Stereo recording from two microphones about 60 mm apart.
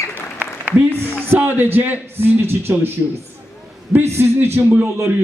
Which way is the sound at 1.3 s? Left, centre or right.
Right.